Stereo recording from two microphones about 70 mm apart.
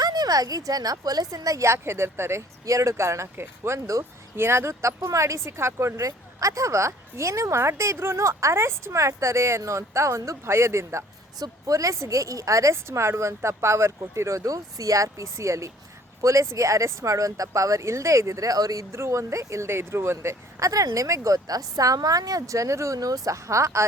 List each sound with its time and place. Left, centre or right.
0.0 s speech: right
11.3 s speech: right
18.9 s speech: right